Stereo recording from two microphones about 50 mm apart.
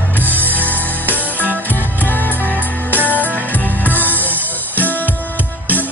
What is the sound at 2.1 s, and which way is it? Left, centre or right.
Music, left.